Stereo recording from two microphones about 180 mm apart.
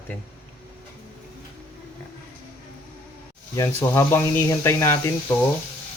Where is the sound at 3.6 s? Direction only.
15° left (ahead or behind).